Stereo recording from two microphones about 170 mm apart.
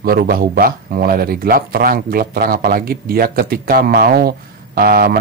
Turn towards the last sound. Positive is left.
turn(degrees=-60)  # may be behind; listen again after turning